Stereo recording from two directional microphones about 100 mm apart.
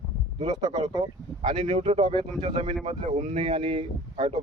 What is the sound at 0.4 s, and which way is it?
Speech, 40° right (ahead or behind).